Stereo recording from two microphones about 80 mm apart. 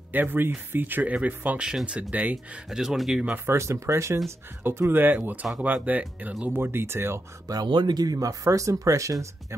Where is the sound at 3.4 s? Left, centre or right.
Right.